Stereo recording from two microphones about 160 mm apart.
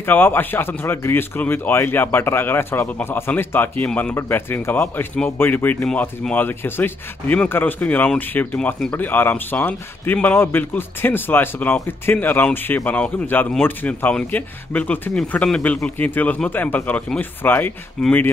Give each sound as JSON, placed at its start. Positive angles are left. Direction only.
{"t": 0.0, "sound": "speech", "side_deg": 15}